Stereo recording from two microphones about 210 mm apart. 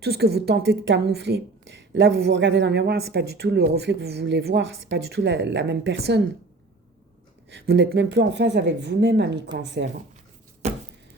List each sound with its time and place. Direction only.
0.0 s speech: 50° right (ahead or behind)
7.5 s speech: 50° right (ahead or behind)
10.6 s a sound: 30° right (ahead or behind)